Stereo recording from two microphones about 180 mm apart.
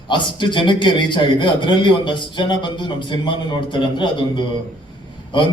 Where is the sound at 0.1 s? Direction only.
25° left (ahead or behind).